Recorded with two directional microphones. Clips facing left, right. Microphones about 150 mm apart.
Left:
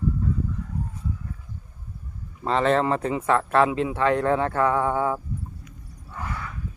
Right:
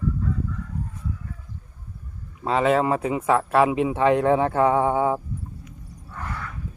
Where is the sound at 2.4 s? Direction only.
5° right (ahead or behind).